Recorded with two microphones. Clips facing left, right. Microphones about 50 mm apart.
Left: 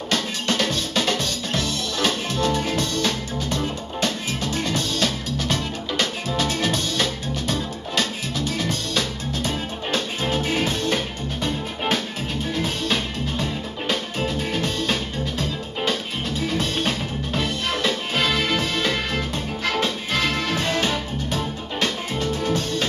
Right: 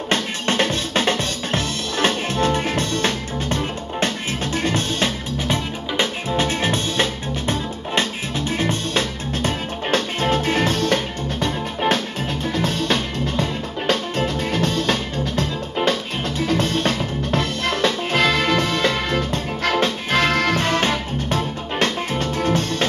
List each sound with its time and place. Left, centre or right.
0.1 s drum: right
5.4 s music: right
13.8 s music: right